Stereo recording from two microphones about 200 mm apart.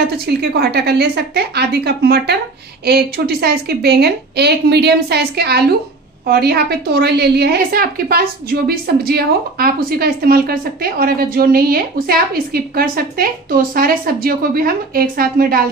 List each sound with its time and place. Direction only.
0.3 s a woman's voice: 55° right (ahead or behind)